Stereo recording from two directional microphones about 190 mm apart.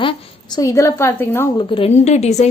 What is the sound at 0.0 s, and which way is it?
A woman's voice, 25° left (ahead or behind).